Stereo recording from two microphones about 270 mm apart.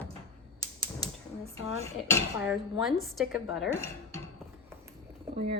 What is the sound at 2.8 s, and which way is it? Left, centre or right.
Speech, centre.